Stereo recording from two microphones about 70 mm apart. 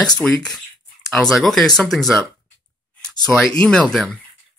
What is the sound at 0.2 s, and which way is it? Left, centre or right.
Speech, centre.